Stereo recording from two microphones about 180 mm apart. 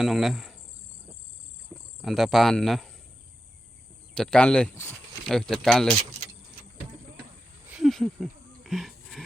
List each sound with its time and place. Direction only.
0.0 s speech: centre (ahead or behind)
2.0 s speech: centre (ahead or behind)
4.1 s speech: 5° left (ahead or behind)
7.7 s a sound: centre (ahead or behind)